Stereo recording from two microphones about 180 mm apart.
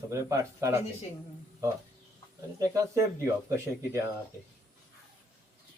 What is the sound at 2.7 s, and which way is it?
Speech, 15° right (ahead or behind).